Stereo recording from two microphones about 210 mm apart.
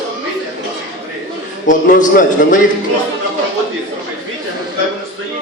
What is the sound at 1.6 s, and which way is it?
Speech, 40° left (ahead or behind).